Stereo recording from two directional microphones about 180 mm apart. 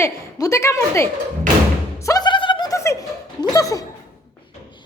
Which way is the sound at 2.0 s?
20° left (ahead or behind).